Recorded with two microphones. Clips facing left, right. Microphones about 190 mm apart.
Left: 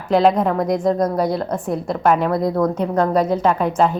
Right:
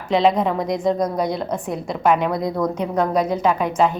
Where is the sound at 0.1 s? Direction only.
Centre (ahead or behind).